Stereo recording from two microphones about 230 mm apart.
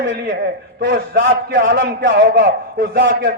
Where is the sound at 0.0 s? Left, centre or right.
Right.